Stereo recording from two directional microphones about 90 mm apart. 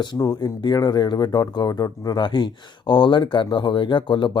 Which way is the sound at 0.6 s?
55° left (ahead or behind).